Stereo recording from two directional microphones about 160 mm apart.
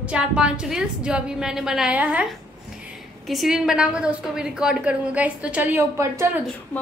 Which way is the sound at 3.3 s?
Centre (ahead or behind).